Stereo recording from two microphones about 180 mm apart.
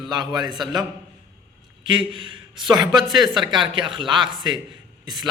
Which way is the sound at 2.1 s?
25° right (ahead or behind).